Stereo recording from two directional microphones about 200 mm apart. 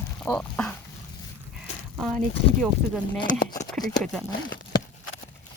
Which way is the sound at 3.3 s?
40° left (ahead or behind).